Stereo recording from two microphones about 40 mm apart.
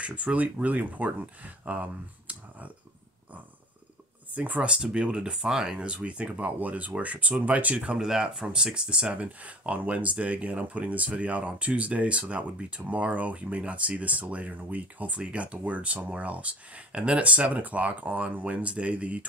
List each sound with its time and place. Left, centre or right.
0.0 s speech: right
4.6 s speech: right
5.9 s speech: right
6.3 s speech: right
8.0 s speech: centre; by 15.1 s right
15.1 s speech: right